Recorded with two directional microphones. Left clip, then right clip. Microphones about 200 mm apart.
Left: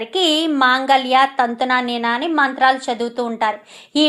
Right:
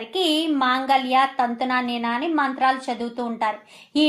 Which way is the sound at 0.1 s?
25° left (ahead or behind).